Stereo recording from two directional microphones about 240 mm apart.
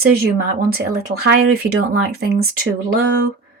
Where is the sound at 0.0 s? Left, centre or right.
Right.